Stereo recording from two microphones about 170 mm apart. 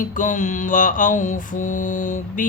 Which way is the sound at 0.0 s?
50° left (ahead or behind).